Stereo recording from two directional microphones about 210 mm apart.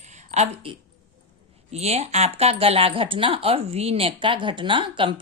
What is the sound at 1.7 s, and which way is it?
A woman's voice, 30° right (ahead or behind).